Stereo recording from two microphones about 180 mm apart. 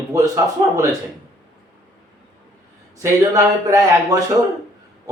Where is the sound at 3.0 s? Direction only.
15° right (ahead or behind).